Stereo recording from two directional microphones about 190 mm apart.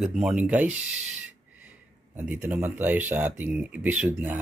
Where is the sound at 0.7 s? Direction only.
35° right (ahead or behind).